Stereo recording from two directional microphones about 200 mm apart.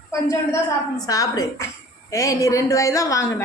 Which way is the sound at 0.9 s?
15° left (ahead or behind).